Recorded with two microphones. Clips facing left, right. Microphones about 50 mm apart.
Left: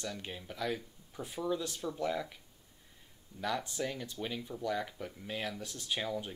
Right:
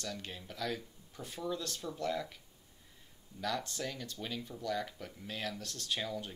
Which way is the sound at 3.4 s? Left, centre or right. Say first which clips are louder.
Left 2 dB; centre.